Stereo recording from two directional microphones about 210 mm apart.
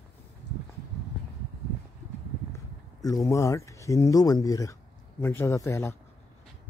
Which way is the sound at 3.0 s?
15° left (ahead or behind).